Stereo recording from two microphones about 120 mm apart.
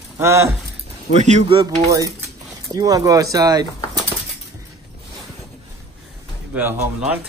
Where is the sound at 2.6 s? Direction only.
30° right (ahead or behind).